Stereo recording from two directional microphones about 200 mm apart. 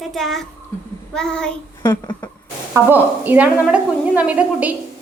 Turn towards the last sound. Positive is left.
turn(degrees=-10)  # may be behind; listen again after turning